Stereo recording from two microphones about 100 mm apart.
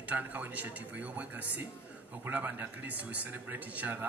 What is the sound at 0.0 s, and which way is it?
Speech, 15° right (ahead or behind).